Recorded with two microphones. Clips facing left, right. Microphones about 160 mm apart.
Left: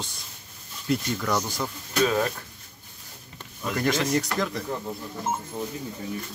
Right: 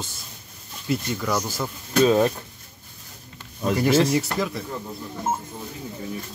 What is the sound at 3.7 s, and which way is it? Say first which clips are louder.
Speech: right 5 dB; 10° right (ahead or behind).